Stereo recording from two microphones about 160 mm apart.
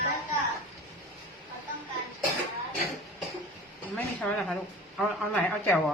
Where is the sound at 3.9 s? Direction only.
5° left (ahead or behind).